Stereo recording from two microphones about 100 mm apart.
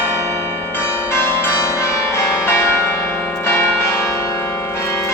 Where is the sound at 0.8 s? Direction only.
25° left (ahead or behind).